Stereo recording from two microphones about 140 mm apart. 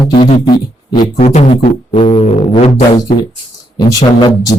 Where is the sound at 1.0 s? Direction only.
55° left (ahead or behind).